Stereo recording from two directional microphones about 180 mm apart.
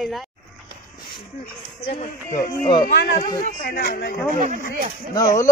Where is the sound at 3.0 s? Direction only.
65° left (ahead or behind).